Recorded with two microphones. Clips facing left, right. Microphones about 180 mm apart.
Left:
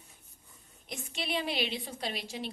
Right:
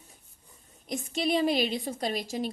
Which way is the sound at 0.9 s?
40° right (ahead or behind).